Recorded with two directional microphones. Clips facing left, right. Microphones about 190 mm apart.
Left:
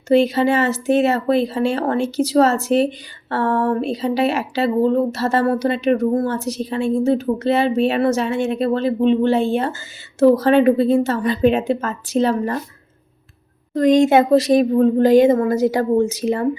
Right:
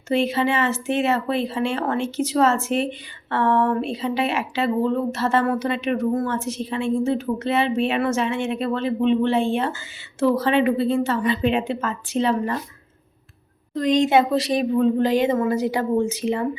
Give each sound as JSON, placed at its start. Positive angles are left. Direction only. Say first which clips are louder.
{"t": 0.1, "sound": "speech", "louder": "left 6 dB", "side_deg": 40}
{"t": 13.7, "sound": "a woman's voice", "louder": "left 5 dB", "side_deg": 45}